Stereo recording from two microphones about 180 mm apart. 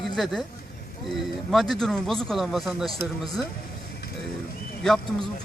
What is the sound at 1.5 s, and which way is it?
A man's voice, centre (ahead or behind).